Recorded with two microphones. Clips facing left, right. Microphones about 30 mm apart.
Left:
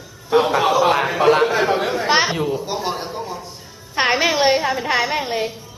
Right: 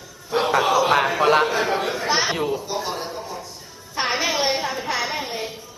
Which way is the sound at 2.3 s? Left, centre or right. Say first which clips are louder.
Left 2 dB; centre.